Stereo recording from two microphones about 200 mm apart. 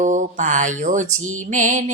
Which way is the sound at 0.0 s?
40° right (ahead or behind).